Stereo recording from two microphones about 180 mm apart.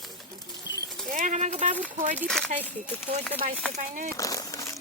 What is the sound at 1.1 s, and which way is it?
Clip-clop, 40° right (ahead or behind).